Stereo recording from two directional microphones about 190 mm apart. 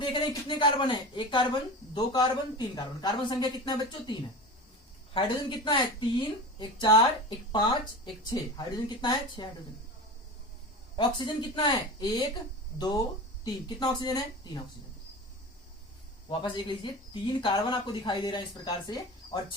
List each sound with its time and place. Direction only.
0.1 s speech: 25° left (ahead or behind)
5.1 s speech: 25° left (ahead or behind)
10.9 s speech: 25° left (ahead or behind)
13.4 s speech: 20° left (ahead or behind)
16.3 s speech: 25° left (ahead or behind)